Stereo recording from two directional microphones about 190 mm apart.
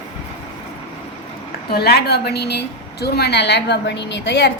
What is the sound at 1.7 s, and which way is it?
A woman's voice, 55° left (ahead or behind).